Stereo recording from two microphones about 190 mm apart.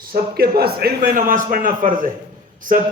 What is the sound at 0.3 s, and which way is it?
A man's voice, 55° right (ahead or behind).